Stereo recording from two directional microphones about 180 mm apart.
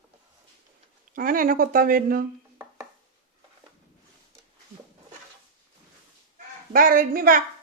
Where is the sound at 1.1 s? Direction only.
50° right (ahead or behind).